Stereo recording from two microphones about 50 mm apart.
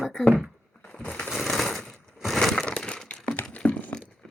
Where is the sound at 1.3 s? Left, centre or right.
Centre.